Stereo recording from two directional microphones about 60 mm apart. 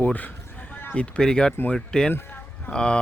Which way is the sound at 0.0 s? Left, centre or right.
Left.